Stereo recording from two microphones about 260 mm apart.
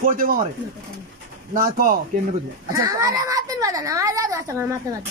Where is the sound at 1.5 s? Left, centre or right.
Right.